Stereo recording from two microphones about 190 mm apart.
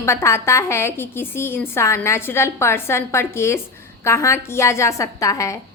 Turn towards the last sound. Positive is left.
turn(degrees=15)  # may be behind; listen again after turning